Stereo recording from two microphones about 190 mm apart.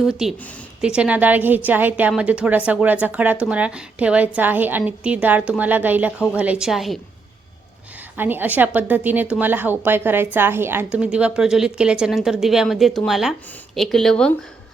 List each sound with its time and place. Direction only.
0.0 s a woman's voice: 5° right (ahead or behind)
8.1 s a woman's voice: 10° right (ahead or behind)